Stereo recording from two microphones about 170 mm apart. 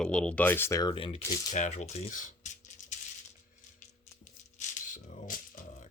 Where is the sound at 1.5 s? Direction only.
45° left (ahead or behind).